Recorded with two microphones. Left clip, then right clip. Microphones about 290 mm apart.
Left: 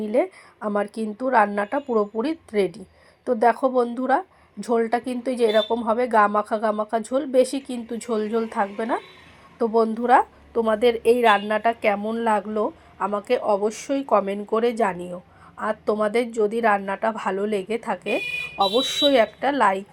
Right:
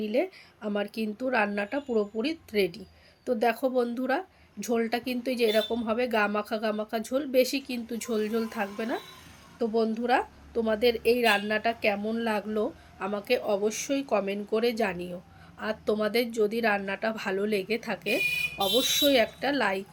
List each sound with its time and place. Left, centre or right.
0.0 s a woman's voice: centre